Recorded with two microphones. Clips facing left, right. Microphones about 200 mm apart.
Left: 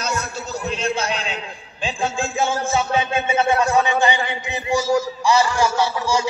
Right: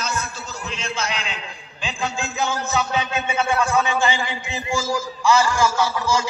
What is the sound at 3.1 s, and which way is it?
A man's voice, 25° left (ahead or behind).